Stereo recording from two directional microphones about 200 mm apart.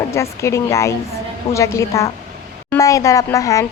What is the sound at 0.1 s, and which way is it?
Speech, 15° left (ahead or behind).